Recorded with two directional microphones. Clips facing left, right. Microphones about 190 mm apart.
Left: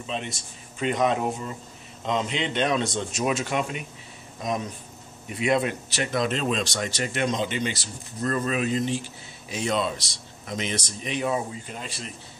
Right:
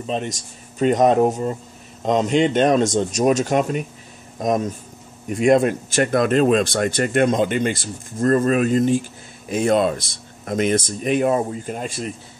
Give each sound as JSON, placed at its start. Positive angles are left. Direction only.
{"t": 0.0, "sound": "speech", "side_deg": -45}